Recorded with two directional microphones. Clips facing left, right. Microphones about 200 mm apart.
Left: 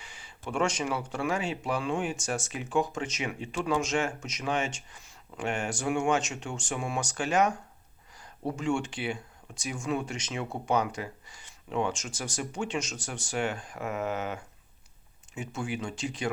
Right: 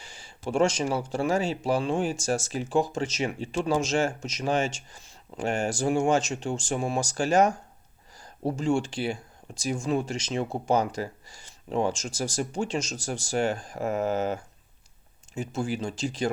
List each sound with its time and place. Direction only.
0.3 s speech: 35° right (ahead or behind)